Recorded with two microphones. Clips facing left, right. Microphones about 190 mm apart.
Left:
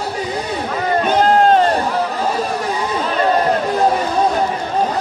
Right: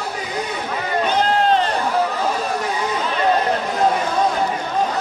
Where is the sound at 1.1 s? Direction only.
50° left (ahead or behind).